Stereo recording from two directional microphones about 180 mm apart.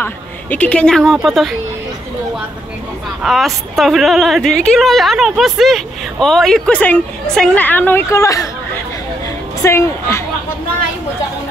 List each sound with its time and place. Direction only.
0.0 s a woman's voice: 10° left (ahead or behind)
3.2 s a woman's voice: centre (ahead or behind); by 8.5 s 15° left (ahead or behind)
9.6 s a woman's voice: 15° left (ahead or behind)